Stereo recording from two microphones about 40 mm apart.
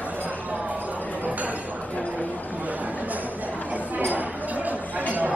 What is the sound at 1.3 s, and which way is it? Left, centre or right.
Speech, right.